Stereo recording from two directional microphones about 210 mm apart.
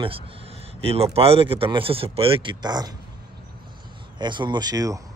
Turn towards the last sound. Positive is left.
turn(degrees=-15)  # may be behind; listen again after turning